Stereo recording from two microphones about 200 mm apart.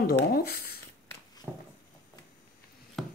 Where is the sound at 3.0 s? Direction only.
Centre (ahead or behind).